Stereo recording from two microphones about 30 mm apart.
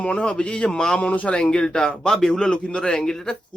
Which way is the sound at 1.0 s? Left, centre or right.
Left.